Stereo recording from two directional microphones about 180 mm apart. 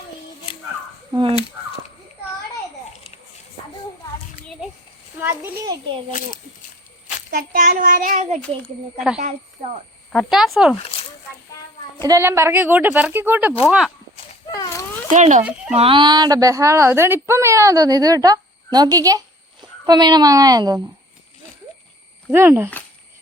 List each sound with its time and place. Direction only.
2.9 s a sound: 40° left (ahead or behind)
5.2 s speech: 10° right (ahead or behind)
7.3 s a child's voice: 55° right (ahead or behind)
10.1 s speech: centre (ahead or behind)
12.0 s speech: 15° right (ahead or behind)
14.5 s a sound: 20° left (ahead or behind)
15.1 s a child's voice: 40° right (ahead or behind)
15.7 s a woman's voice: 30° right (ahead or behind)
22.3 s speech: 10° right (ahead or behind)